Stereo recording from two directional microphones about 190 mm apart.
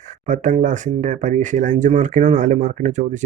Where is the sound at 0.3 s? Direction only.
40° right (ahead or behind).